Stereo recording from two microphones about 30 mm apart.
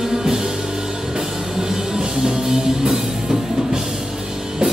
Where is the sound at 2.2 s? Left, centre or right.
Right.